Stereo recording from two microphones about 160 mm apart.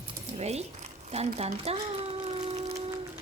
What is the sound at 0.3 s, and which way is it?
Speech, 40° right (ahead or behind).